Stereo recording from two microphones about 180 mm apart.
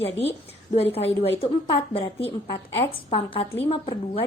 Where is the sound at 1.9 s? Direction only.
30° left (ahead or behind).